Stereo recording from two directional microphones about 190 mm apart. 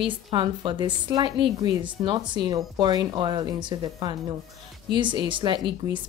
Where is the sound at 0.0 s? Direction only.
25° right (ahead or behind).